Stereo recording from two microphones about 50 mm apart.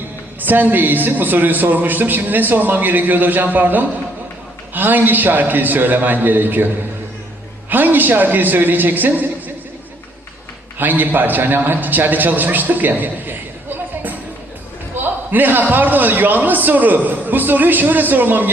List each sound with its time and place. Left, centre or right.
0.3 s a man's voice: right
7.7 s a man's voice: right
10.8 s a man's voice: right
15.0 s a man's voice: right